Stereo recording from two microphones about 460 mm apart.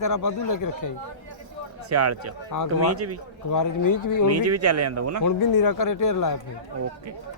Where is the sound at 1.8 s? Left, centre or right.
Right.